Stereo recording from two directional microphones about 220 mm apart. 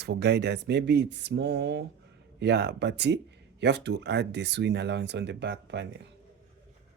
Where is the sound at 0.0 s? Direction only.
50° right (ahead or behind).